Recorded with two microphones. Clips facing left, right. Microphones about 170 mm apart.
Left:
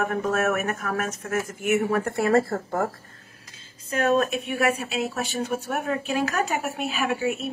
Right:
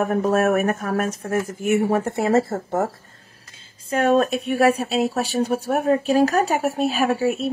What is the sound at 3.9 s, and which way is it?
Speech, 35° right (ahead or behind).